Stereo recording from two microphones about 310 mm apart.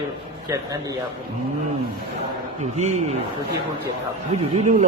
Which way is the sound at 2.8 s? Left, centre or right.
Right.